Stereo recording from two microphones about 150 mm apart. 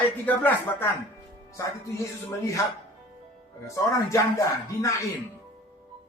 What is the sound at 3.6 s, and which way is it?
Speech, 20° left (ahead or behind).